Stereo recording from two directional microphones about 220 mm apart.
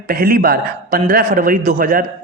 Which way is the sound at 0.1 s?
40° right (ahead or behind).